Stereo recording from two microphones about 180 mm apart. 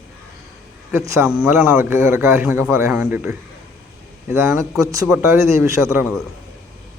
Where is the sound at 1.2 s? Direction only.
5° right (ahead or behind).